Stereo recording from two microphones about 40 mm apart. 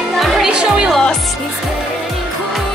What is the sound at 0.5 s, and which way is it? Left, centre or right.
Music, right.